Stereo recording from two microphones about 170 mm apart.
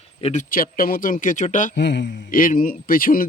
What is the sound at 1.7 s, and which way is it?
Speech, 90° left.